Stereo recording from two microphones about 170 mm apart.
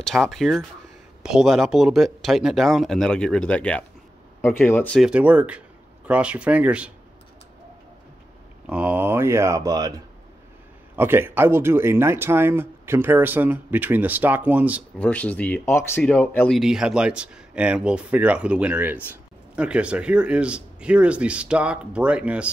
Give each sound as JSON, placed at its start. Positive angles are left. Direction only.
{"t": 0.0, "sound": "speech", "side_deg": 0}
{"t": 5.0, "sound": "speech", "side_deg": -10}
{"t": 8.6, "sound": "speech", "side_deg": -10}
{"t": 15.0, "sound": "speech", "side_deg": 10}
{"t": 16.5, "sound": "speech", "side_deg": -5}